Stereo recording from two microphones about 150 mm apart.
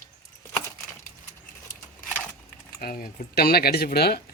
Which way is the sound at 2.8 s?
70° left (ahead or behind).